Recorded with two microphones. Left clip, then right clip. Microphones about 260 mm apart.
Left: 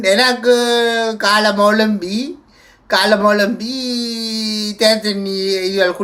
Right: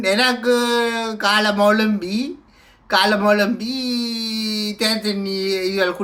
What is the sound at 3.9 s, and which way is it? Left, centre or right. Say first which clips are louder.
Speech: left 3 dB; right.